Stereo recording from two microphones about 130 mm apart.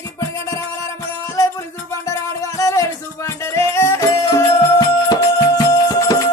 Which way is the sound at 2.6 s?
25° left (ahead or behind).